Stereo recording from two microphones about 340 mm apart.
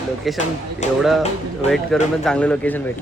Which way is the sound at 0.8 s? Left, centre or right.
Left.